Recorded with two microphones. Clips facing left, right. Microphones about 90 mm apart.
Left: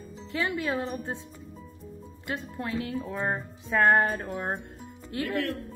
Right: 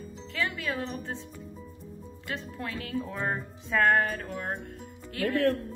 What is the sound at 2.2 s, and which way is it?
Speech, 25° left (ahead or behind).